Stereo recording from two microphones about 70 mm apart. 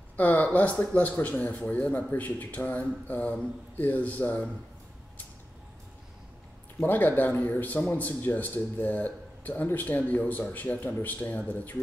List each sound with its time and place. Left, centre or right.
0.2 s speech: left
6.8 s speech: left